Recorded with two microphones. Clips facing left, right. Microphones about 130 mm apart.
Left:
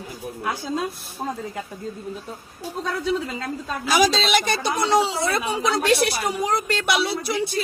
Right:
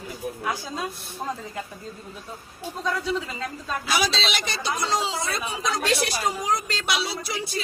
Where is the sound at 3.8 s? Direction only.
45° left (ahead or behind).